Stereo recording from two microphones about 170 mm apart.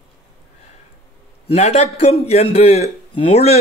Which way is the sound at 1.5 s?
40° left (ahead or behind).